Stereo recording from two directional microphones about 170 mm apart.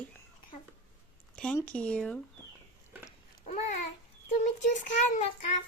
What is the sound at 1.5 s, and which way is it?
Speech, 10° left (ahead or behind).